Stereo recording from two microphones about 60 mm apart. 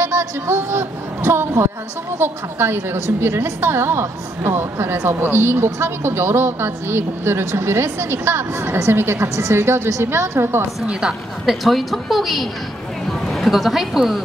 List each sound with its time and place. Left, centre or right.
0.5 s a woman's voice: right
10.9 s a woman's voice: centre
11.4 s a woman's voice: centre